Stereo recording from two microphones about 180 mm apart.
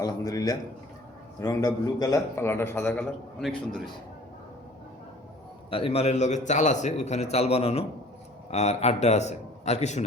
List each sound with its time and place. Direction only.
0.0 s a man's voice: 20° left (ahead or behind); by 3.5 s 5° left (ahead or behind)
5.7 s a man's voice: 35° left (ahead or behind)